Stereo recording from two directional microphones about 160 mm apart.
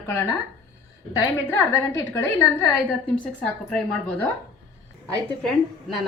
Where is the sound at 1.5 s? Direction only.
15° left (ahead or behind).